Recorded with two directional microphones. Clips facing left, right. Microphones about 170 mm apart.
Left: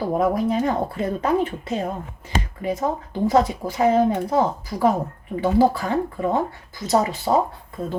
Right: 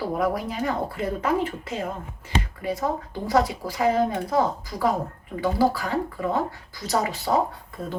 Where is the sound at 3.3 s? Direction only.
20° left (ahead or behind).